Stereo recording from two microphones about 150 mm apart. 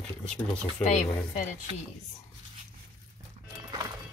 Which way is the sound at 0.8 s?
50° left (ahead or behind).